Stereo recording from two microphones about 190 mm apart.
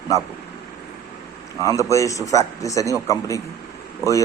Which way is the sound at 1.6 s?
15° left (ahead or behind).